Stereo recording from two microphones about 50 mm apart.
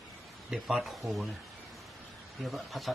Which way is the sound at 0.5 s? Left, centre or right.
Centre.